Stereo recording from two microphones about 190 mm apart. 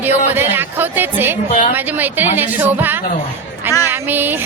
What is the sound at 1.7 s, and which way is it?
A woman's voice, 10° right (ahead or behind).